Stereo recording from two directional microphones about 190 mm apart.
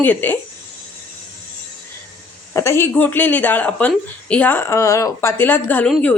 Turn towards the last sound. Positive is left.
turn(degrees=10)  # may be behind; listen again after turning